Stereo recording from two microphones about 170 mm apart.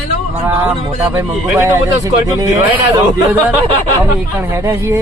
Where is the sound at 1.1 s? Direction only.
10° right (ahead or behind).